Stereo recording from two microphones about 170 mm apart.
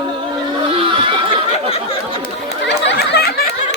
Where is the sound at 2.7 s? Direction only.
85° left; by 3.4 s 65° left (ahead or behind).